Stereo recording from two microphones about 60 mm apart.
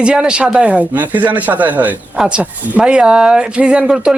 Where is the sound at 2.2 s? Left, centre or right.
Centre.